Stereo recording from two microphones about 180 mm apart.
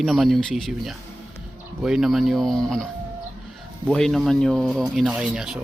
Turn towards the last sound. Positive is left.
turn(degrees=-5)  # may be behind; listen again after turning